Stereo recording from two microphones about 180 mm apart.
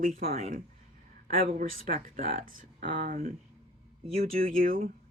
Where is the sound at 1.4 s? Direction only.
50° right (ahead or behind).